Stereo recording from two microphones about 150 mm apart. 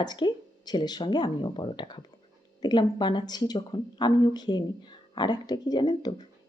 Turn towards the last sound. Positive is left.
turn(degrees=30)  # may be behind; listen again after turning